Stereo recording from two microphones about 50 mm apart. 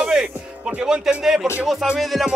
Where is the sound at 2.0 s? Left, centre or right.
Centre.